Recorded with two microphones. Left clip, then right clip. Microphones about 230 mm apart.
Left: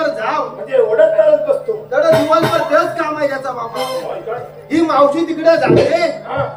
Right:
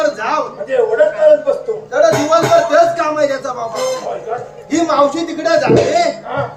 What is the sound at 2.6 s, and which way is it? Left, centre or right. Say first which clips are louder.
Speech: right 3 dB; centre.